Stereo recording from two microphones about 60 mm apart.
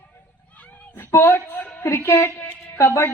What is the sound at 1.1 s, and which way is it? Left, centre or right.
Speech, left.